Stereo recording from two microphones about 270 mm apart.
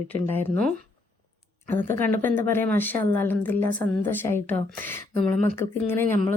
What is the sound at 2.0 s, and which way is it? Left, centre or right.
Speech, centre.